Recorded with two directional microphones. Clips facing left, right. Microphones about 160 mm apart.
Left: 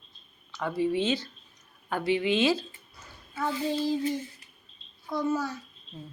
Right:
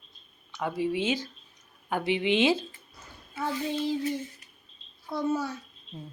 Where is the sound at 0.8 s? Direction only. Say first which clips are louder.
Left 2 dB; 10° right (ahead or behind).